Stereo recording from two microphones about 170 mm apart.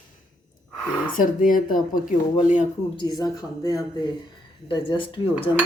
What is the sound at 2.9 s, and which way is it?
Speech, 25° left (ahead or behind).